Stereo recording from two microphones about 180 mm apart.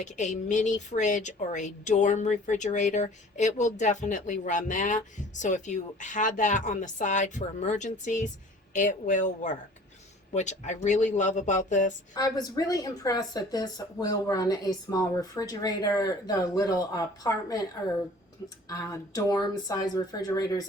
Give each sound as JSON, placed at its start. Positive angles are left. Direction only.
{"t": 0.0, "sound": "a woman's voice", "side_deg": 40}
{"t": 12.1, "sound": "speech", "side_deg": 20}